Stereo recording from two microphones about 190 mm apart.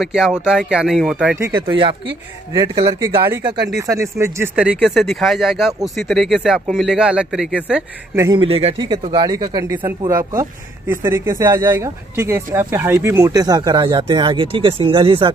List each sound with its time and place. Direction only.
0.0 s speech: 5° right (ahead or behind)
1.5 s speech: 25° right (ahead or behind); by 8.3 s 5° right (ahead or behind)
8.3 s speech: 30° right (ahead or behind)